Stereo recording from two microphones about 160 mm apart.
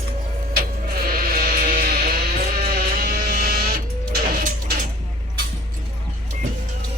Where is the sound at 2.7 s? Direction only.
65° right (ahead or behind).